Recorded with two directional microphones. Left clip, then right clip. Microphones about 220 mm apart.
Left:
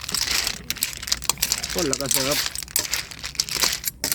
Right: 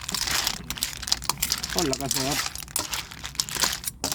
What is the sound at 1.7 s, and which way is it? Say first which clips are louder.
Speech: left 2 dB; 5° right (ahead or behind).